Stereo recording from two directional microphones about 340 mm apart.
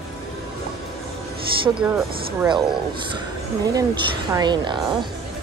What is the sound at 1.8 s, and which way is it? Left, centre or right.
Speech, centre.